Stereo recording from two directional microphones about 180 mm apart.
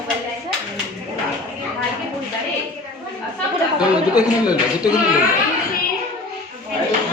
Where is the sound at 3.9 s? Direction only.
20° left (ahead or behind).